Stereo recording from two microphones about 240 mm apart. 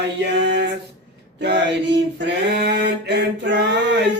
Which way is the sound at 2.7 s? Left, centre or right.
Right.